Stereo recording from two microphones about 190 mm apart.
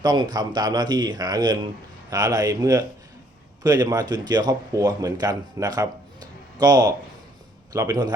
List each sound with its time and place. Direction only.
0.0 s speech: 20° right (ahead or behind)